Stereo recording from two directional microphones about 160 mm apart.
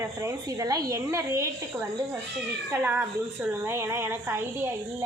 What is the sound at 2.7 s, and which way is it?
A woman's voice, 15° right (ahead or behind).